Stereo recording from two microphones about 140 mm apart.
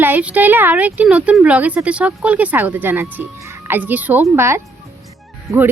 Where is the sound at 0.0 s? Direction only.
10° right (ahead or behind).